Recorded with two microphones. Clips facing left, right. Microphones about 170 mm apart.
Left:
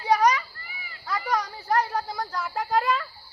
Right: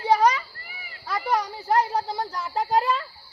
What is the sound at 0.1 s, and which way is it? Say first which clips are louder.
Children playing: right 1 dB; 25° right (ahead or behind).